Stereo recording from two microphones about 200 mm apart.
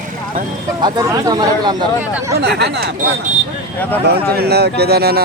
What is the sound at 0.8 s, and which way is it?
Speech, 15° right (ahead or behind).